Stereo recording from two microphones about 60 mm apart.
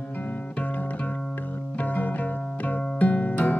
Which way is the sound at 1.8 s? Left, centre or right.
Left.